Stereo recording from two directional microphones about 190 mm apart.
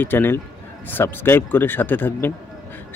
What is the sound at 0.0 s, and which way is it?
Speech, 10° left (ahead or behind).